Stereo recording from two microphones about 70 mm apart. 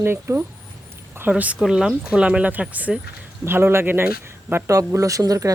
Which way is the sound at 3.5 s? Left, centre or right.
Right.